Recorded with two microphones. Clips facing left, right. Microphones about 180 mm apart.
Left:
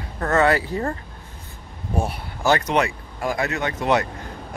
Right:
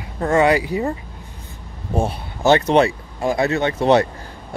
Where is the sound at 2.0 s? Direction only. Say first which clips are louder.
Right 4 dB; 25° right (ahead or behind).